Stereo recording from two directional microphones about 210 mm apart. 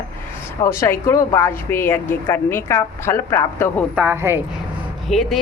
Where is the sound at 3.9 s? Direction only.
10° right (ahead or behind).